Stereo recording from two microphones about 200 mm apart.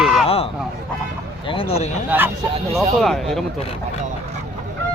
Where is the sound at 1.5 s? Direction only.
25° left (ahead or behind).